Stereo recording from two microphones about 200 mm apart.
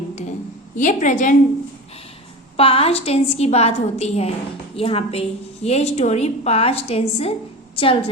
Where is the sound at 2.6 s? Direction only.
30° left (ahead or behind).